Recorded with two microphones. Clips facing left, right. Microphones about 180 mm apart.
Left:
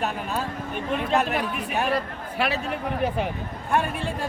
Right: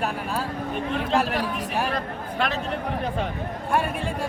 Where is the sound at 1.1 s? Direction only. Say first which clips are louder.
Even; 5° left (ahead or behind).